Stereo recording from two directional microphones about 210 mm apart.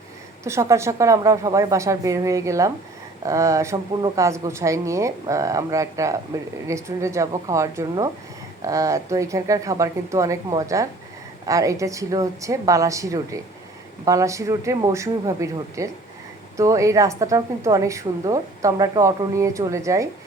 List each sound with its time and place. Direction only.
0.4 s a woman's voice: 15° right (ahead or behind)